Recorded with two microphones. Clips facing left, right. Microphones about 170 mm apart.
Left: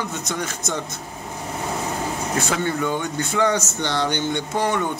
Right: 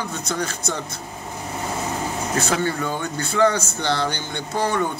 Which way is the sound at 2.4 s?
15° left (ahead or behind).